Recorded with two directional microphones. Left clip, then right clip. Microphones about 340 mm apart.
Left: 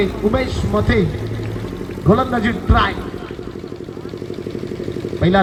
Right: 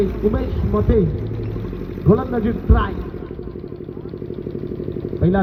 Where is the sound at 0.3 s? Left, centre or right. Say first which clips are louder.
Left 3 dB; left.